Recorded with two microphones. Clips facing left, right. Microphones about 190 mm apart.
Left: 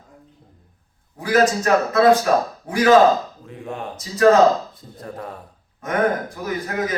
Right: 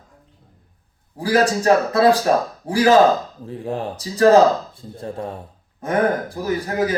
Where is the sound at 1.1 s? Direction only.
30° right (ahead or behind).